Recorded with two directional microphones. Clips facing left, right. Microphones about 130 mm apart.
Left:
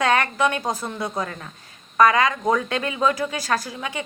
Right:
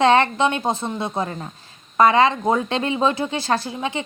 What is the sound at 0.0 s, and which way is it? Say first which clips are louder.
A woman's voice: right 4 dB; 25° right (ahead or behind).